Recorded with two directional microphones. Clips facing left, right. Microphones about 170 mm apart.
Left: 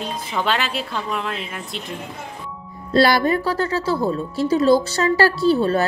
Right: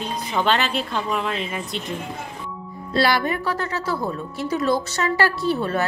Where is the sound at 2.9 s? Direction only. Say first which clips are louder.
Left 5 dB; 40° left (ahead or behind).